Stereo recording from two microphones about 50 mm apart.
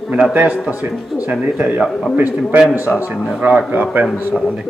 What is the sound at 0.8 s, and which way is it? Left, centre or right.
A man's voice, right.